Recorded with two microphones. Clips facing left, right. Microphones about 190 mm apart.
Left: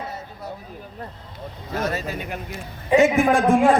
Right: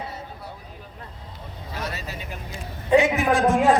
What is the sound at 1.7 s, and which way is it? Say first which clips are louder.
A man's voice: left 7 dB; 50° left (ahead or behind).